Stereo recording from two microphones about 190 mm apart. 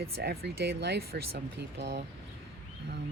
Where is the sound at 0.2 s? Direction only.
60° right (ahead or behind).